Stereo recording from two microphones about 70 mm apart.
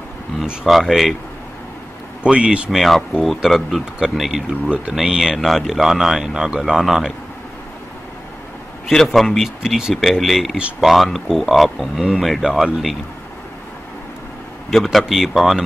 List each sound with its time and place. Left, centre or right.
0.7 s speech: centre
2.2 s speech: centre
2.7 s speech: centre
8.8 s speech: centre
14.7 s speech: centre